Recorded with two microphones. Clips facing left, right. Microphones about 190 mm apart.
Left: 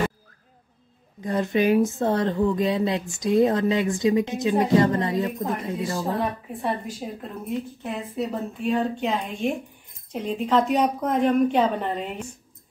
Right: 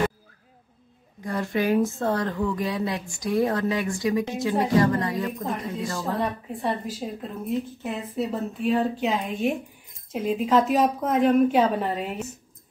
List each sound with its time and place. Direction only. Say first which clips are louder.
1.2 s a woman's voice: left 3 dB; 20° left (ahead or behind)
6.1 s a woman's voice: left 1 dB; centre (ahead or behind)